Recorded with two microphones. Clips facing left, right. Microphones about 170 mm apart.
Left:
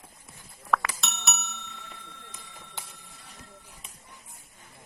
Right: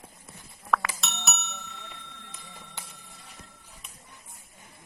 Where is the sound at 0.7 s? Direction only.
Centre (ahead or behind).